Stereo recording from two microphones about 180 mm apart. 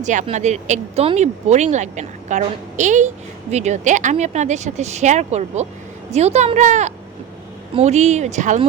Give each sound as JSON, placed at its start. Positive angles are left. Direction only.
{"t": 0.0, "sound": "speech", "side_deg": -40}